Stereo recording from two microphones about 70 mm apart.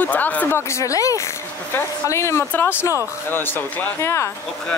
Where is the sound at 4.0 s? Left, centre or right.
Left.